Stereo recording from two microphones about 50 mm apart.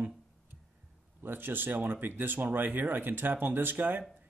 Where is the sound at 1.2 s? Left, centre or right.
Right.